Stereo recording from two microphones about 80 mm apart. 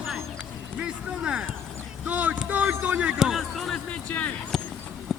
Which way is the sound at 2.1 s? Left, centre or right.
Centre.